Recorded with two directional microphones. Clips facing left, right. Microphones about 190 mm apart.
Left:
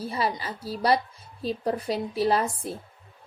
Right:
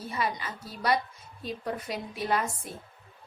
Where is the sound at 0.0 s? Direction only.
30° left (ahead or behind).